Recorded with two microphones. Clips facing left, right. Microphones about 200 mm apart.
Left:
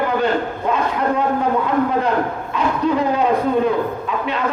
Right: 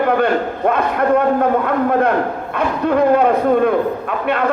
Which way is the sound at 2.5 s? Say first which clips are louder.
Right 2 dB; 55° right (ahead or behind).